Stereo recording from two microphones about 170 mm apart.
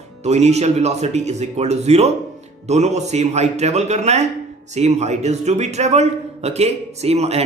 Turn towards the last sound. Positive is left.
turn(degrees=-40)  # may be behind; listen again after turning